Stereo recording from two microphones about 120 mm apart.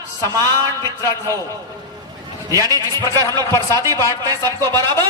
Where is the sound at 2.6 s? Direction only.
30° right (ahead or behind).